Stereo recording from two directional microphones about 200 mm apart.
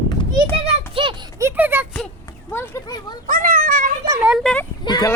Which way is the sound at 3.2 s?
45° right (ahead or behind).